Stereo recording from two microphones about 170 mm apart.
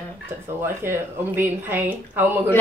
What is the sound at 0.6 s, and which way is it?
Speech, 15° right (ahead or behind).